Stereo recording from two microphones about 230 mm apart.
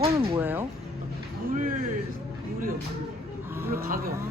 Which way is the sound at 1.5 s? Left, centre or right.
Right.